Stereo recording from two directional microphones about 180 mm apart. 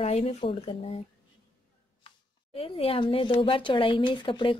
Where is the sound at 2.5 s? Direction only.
30° left (ahead or behind).